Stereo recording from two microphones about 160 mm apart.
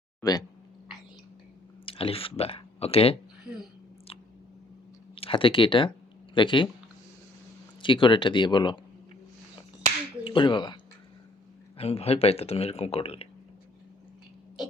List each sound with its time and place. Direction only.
0.2 s speech: 25° left (ahead or behind)
1.8 s speech: 35° left (ahead or behind)
5.1 s speech: 35° left (ahead or behind)
7.8 s speech: 30° left (ahead or behind)
10.2 s speech: 30° left (ahead or behind)
11.8 s speech: 40° left (ahead or behind)